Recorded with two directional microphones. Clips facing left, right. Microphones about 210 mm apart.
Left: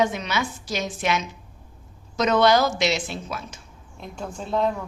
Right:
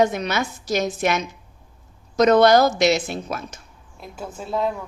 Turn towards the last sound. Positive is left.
turn(degrees=-5)  # may be behind; listen again after turning